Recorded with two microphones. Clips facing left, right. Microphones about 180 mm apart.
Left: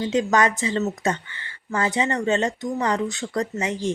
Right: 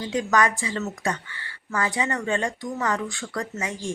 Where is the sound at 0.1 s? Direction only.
25° left (ahead or behind).